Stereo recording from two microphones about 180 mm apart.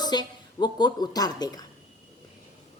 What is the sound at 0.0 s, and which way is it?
A woman's voice, 25° left (ahead or behind).